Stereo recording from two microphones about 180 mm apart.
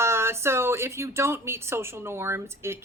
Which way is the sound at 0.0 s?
15° right (ahead or behind).